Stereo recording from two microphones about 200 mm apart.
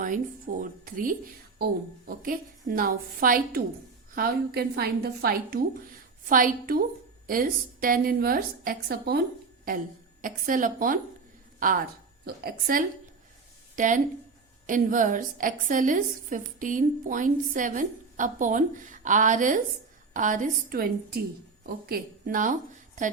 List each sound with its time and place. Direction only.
0.0 s a woman's voice: 40° right (ahead or behind)
12.2 s a woman's voice: 50° right (ahead or behind)